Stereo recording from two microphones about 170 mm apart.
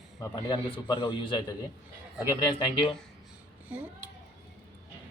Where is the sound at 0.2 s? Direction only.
25° left (ahead or behind).